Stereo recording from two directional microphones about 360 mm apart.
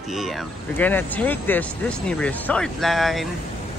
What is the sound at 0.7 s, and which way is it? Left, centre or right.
Speech, centre.